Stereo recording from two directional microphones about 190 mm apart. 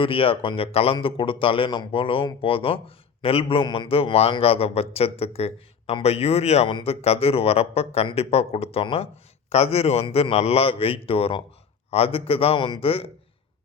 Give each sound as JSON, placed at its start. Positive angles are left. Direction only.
{"t": 0.0, "sound": "speech", "side_deg": 30}